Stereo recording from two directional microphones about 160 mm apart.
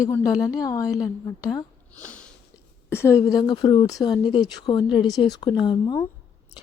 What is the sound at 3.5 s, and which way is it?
Speech, 35° left (ahead or behind).